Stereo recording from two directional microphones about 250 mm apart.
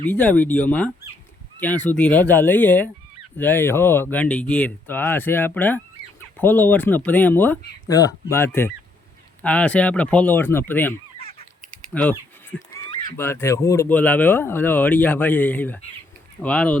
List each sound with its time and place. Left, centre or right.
0.1 s speech: centre
11.2 s goose: left
11.9 s speech: centre
13.1 s speech: centre